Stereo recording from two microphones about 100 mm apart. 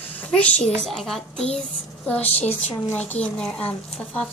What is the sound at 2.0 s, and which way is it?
A woman's voice, 15° left (ahead or behind).